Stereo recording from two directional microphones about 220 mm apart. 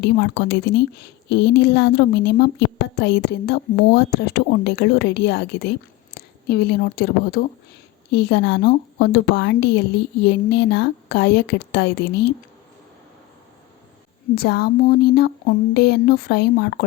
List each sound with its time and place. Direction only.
0.0 s a woman's voice: 50° left (ahead or behind)
14.3 s a woman's voice: 45° left (ahead or behind)